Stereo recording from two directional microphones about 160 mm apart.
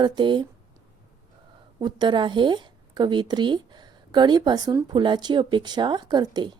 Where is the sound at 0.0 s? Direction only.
30° right (ahead or behind).